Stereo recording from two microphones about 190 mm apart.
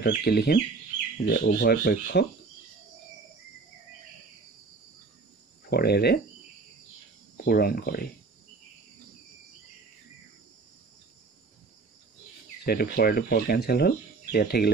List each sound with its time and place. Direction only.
0.0 s speech: 60° left (ahead or behind)
5.7 s speech: 55° left (ahead or behind)
7.4 s speech: 55° left (ahead or behind)
12.6 s speech: 55° left (ahead or behind)